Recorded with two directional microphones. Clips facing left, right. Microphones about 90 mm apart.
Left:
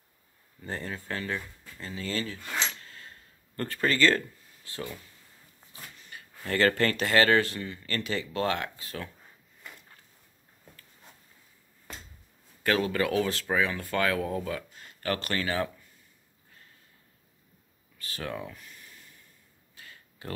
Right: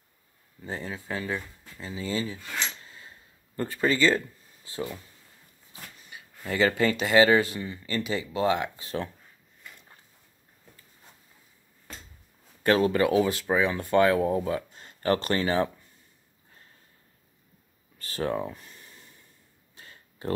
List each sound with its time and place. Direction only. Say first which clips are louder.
0.7 s speech: right 1 dB; 5° right (ahead or behind)
2.8 s a sound: even; 15° right (ahead or behind)
4.6 s speech: right 4 dB; 25° right (ahead or behind)
5.7 s speech: right 1 dB; 10° right (ahead or behind); by 9.1 s 25° right (ahead or behind)
12.6 s speech: right 5 dB; 30° right (ahead or behind)
17.9 s a sound: right 7 dB; 35° right (ahead or behind)